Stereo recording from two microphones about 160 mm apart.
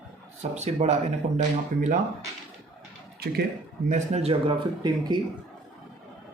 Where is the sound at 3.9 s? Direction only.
40° right (ahead or behind).